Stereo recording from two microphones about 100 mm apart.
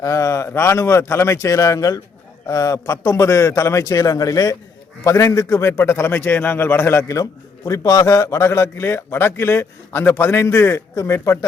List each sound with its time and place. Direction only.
0.0 s a man's voice: 35° left (ahead or behind)